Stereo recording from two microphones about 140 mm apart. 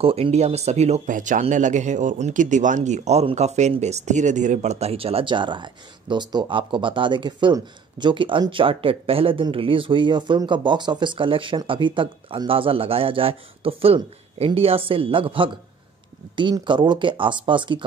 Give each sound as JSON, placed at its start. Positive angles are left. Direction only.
{"t": 0.0, "sound": "speech", "side_deg": -45}